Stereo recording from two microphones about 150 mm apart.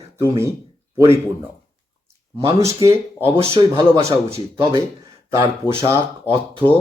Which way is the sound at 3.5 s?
40° right (ahead or behind).